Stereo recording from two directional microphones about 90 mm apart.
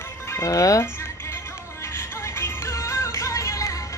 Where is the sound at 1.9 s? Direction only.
30° left (ahead or behind).